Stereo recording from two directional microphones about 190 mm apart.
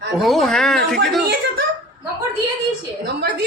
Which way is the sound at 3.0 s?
60° right (ahead or behind).